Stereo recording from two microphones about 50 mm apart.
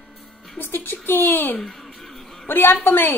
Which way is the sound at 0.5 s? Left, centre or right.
Left.